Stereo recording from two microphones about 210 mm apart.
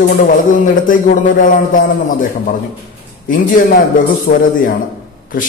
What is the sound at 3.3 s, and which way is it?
Speech, 40° left (ahead or behind).